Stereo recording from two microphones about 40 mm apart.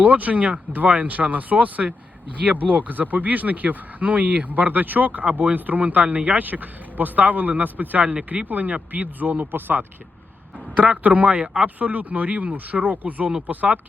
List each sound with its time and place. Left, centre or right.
0.0 s speech: right
8.0 s speech: right
8.4 s speech: right
10.8 s speech: right